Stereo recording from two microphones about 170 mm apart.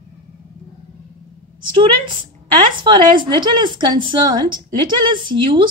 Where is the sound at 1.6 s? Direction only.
30° right (ahead or behind).